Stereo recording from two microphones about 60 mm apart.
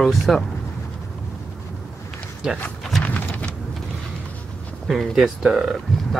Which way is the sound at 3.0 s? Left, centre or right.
Left.